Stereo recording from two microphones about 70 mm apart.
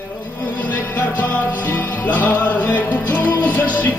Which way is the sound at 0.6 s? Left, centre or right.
Left.